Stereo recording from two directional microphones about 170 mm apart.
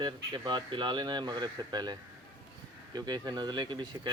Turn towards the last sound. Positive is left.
turn(degrees=-25)  # may be behind; listen again after turning